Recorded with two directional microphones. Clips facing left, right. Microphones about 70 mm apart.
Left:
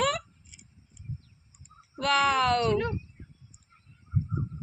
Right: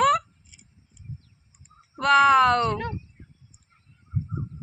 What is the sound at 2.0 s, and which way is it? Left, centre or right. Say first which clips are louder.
Speech: right 7 dB; centre.